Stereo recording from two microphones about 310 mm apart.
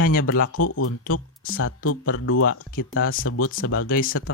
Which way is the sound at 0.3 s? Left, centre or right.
Left.